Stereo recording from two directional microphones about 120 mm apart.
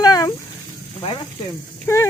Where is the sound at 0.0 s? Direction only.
30° left (ahead or behind).